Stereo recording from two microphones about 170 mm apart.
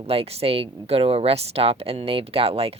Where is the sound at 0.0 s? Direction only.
35° right (ahead or behind).